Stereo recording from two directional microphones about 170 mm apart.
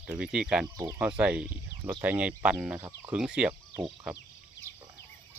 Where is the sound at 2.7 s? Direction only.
15° right (ahead or behind).